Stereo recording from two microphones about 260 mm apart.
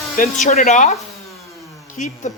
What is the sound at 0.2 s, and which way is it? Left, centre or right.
Speech, left.